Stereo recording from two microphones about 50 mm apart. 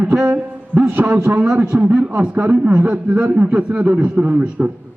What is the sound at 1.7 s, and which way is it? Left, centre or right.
A man's voice, right.